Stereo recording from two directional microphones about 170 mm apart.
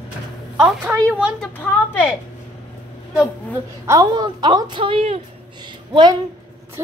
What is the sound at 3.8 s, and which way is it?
A woman's voice, 20° right (ahead or behind).